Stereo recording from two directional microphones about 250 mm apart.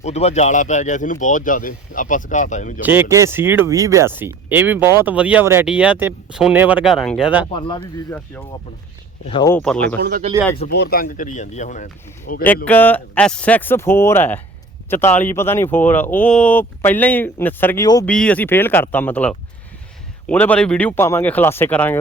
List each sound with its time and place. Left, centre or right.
0.0 s speech: left
2.8 s speech: centre
9.2 s speech: left
9.5 s speech: centre
10.0 s speech: right
10.7 s speech: left
12.6 s speech: centre